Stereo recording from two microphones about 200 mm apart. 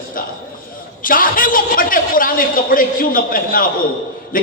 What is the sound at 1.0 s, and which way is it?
Speech, 45° left (ahead or behind).